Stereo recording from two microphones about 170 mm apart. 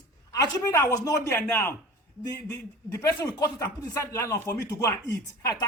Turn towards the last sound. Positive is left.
turn(degrees=20)  # may be behind; listen again after turning